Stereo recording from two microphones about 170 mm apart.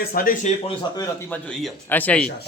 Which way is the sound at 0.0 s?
60° left (ahead or behind).